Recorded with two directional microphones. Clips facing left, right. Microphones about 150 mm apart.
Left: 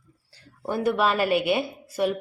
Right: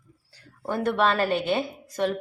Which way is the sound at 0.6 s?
10° left (ahead or behind).